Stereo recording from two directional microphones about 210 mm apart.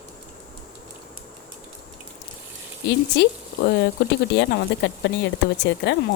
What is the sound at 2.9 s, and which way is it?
Speech, 55° left (ahead or behind).